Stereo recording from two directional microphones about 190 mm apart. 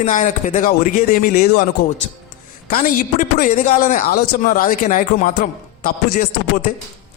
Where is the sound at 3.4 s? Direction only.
45° left (ahead or behind).